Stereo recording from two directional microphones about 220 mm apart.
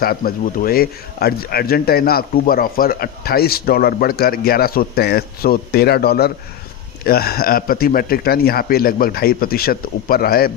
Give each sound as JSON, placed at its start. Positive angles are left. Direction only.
{"t": 0.0, "sound": "speech", "side_deg": 40}